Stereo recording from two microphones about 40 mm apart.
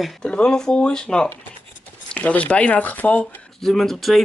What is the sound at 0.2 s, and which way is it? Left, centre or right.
Speech, left.